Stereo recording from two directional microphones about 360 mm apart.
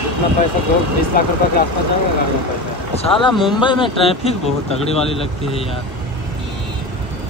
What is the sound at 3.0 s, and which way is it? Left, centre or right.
Speech, centre.